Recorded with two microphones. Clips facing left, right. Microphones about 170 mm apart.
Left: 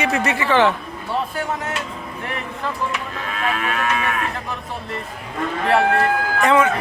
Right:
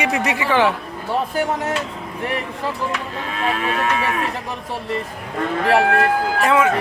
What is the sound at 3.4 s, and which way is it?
Moo, 30° right (ahead or behind).